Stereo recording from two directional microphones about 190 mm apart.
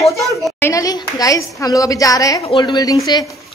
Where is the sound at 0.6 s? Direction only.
15° left (ahead or behind).